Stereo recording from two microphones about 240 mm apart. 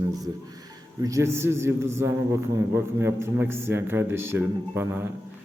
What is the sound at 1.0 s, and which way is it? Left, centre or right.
A man's voice, centre.